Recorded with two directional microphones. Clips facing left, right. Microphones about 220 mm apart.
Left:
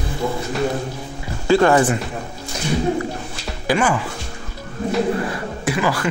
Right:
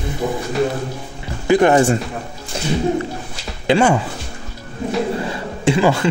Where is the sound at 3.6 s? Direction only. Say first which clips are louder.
Right 4 dB; 25° right (ahead or behind).